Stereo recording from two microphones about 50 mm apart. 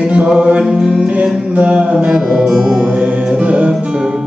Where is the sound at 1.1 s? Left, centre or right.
Right.